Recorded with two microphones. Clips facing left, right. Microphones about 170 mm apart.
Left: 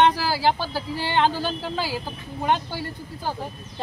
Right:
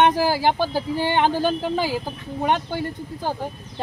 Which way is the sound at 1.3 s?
50° right (ahead or behind).